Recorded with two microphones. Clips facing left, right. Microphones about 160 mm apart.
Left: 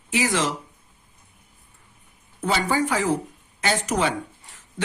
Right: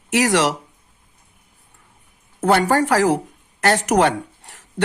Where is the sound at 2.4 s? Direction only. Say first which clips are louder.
Right 7 dB; 75° right (ahead or behind).